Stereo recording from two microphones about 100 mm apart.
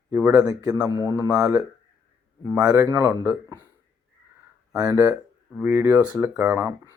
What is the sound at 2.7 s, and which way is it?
Speech, 35° right (ahead or behind).